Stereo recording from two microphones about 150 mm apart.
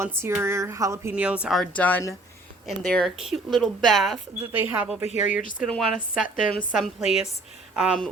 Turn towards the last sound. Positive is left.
turn(degrees=-5)  # may be behind; listen again after turning